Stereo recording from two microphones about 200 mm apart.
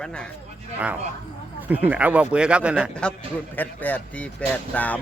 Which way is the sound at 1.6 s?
5° right (ahead or behind).